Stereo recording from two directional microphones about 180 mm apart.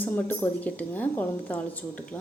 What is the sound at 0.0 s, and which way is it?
A woman's voice, 10° left (ahead or behind).